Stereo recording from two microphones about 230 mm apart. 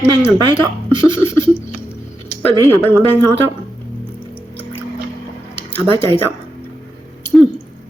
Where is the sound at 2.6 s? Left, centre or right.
Centre.